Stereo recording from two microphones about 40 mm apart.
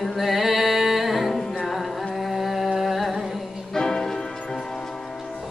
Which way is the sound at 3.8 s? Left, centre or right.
Centre.